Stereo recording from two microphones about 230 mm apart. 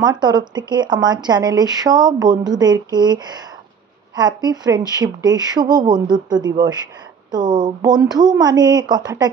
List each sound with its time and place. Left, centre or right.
0.0 s speech: centre